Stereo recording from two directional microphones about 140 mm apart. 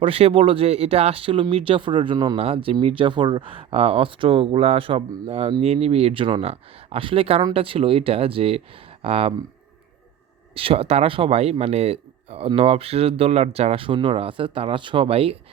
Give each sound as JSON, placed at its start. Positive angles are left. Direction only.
{"t": 0.0, "sound": "speech", "side_deg": -45}
{"t": 10.5, "sound": "speech", "side_deg": -40}